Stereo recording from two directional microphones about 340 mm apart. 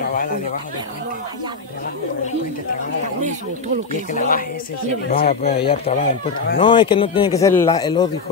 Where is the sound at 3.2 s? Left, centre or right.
Right.